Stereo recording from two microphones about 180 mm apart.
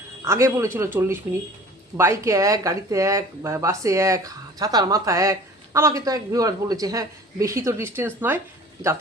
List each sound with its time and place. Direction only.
0.3 s speech: 15° right (ahead or behind)